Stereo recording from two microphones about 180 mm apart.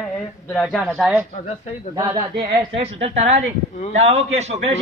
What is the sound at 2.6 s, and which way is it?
A man's voice, 30° right (ahead or behind).